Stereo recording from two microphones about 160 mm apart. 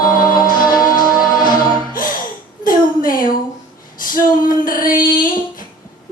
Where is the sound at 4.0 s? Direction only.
60° left (ahead or behind).